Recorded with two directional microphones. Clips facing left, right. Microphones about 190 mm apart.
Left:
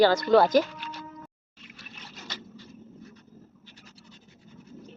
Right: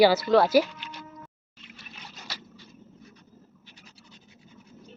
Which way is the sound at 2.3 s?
10° right (ahead or behind).